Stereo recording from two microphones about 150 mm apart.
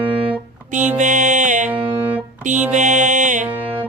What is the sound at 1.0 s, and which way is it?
Music, 55° right (ahead or behind).